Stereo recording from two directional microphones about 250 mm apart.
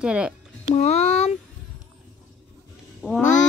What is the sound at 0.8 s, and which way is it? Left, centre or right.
Speech, left.